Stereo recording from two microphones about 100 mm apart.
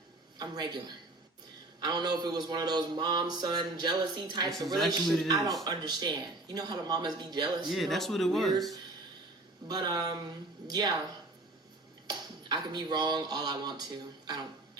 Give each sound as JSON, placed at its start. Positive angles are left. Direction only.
{"t": 0.3, "sound": "mantra", "side_deg": -45}
{"t": 4.4, "sound": "speech", "side_deg": 0}
{"t": 5.3, "sound": "speech", "side_deg": -35}
{"t": 5.6, "sound": "mantra", "side_deg": -45}
{"t": 7.7, "sound": "speech", "side_deg": 0}
{"t": 9.6, "sound": "mantra", "side_deg": -45}
{"t": 12.0, "sound": "speech", "side_deg": -45}